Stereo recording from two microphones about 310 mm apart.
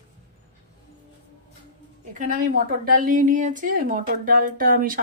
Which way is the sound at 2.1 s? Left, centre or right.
Right.